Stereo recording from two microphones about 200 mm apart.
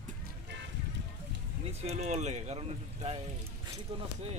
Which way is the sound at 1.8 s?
35° right (ahead or behind).